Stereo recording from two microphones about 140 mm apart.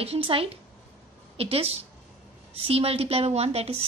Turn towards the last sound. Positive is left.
turn(degrees=-45)  # may be behind; listen again after turning